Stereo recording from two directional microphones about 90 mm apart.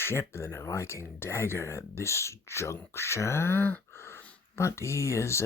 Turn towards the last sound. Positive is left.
turn(degrees=30)  # may be behind; listen again after turning